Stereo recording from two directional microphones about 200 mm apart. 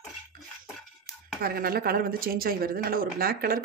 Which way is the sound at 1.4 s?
50° right (ahead or behind).